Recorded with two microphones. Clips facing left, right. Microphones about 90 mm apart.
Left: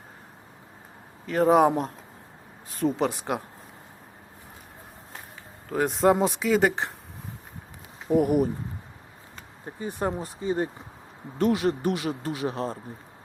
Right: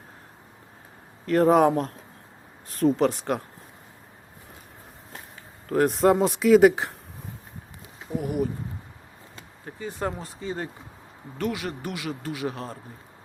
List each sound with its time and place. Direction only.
1.3 s a man's voice: 5° left (ahead or behind)
5.6 s speech: centre (ahead or behind)
8.1 s speech: 55° left (ahead or behind)
9.6 s speech: 20° left (ahead or behind)